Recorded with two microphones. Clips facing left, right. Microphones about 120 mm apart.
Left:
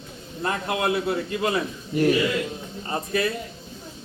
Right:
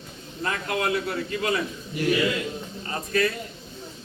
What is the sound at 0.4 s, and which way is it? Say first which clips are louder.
A man's voice: left 2 dB; 25° left (ahead or behind).